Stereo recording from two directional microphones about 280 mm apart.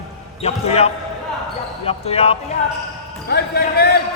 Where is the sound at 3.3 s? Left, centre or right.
Left.